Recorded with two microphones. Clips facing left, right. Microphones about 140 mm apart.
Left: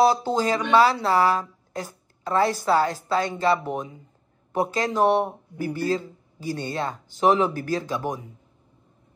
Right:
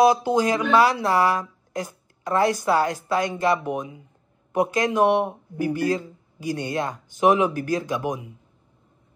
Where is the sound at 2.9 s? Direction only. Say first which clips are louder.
Right 1 dB; 15° right (ahead or behind).